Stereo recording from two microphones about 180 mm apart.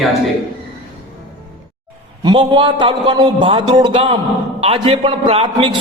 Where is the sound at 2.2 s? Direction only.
25° right (ahead or behind).